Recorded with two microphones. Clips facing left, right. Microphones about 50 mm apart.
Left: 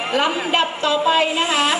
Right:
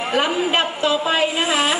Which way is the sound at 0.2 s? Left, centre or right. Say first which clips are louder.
Even; centre.